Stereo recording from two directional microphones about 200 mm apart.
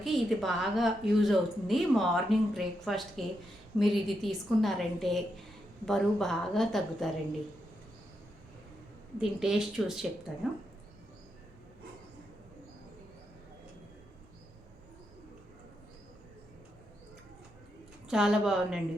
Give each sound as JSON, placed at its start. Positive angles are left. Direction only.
{"t": 0.0, "sound": "a woman's voice", "side_deg": 0}
{"t": 9.2, "sound": "a woman's voice", "side_deg": 0}
{"t": 18.1, "sound": "a woman's voice", "side_deg": -5}